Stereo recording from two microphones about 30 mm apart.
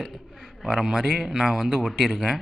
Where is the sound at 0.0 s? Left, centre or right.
Centre.